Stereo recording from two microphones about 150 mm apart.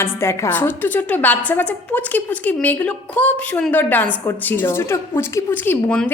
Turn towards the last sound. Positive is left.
turn(degrees=10)  # may be behind; listen again after turning